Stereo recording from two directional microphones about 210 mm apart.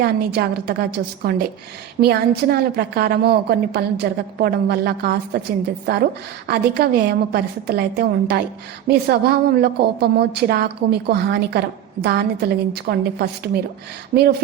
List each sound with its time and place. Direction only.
0.0 s a woman's voice: 50° right (ahead or behind)
6.5 s a woman's voice: 50° right (ahead or behind)